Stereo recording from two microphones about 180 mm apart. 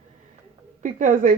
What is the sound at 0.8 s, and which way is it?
Speech, 45° right (ahead or behind).